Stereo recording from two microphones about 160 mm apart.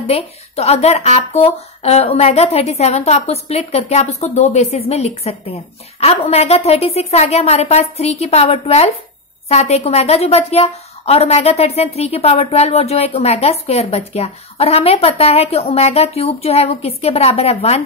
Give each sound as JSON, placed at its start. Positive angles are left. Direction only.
{"t": 0.0, "sound": "speech", "side_deg": 40}